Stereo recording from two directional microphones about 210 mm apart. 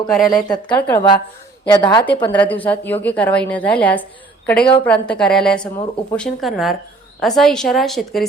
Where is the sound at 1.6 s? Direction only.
20° left (ahead or behind).